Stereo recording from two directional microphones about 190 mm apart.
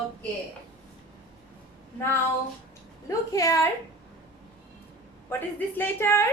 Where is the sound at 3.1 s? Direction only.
15° left (ahead or behind).